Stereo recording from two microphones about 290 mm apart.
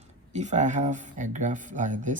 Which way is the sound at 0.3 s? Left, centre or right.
Right.